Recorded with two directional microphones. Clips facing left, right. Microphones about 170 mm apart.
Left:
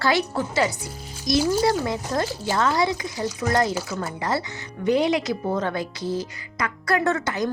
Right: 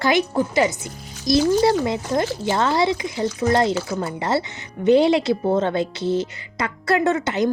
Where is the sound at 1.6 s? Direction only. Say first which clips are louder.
Right 4 dB; 20° right (ahead or behind).